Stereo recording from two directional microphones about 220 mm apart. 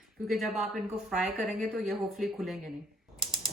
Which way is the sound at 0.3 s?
Centre (ahead or behind).